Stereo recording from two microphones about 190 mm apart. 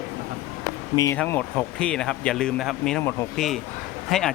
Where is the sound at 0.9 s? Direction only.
15° left (ahead or behind).